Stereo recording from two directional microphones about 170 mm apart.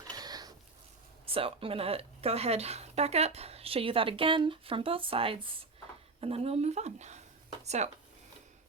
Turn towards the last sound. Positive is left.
turn(degrees=-40)  # may be behind; listen again after turning